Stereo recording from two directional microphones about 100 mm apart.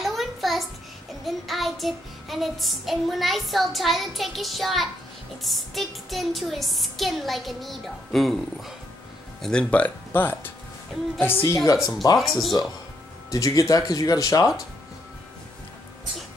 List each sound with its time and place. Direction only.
0.0 s a sound: centre (ahead or behind)
1.2 s child singing: centre (ahead or behind)
9.4 s speech: 10° left (ahead or behind); by 11.9 s 35° left (ahead or behind)
12.2 s child singing: centre (ahead or behind)
13.3 s speech: 35° left (ahead or behind)